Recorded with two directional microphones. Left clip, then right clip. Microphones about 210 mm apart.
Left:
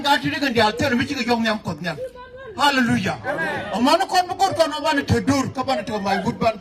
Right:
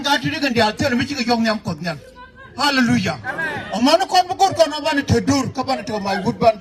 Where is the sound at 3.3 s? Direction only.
45° left (ahead or behind).